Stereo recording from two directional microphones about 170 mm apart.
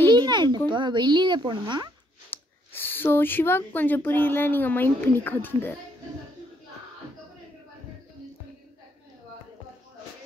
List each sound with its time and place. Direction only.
0.1 s a sound: 25° right (ahead or behind)
0.7 s speech: 25° right (ahead or behind)
2.3 s speech: 10° left (ahead or behind)